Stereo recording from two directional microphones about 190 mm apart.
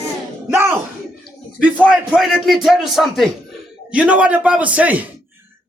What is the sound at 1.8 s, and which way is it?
A man's voice, 5° right (ahead or behind).